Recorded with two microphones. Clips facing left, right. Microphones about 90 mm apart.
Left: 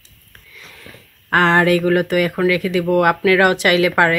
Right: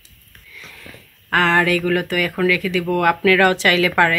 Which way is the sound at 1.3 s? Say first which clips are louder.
Left 3 dB; 25° left (ahead or behind).